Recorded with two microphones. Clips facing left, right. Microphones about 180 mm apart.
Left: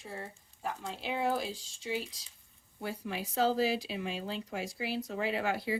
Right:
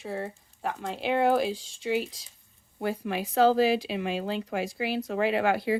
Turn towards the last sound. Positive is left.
turn(degrees=-65)  # may be behind; listen again after turning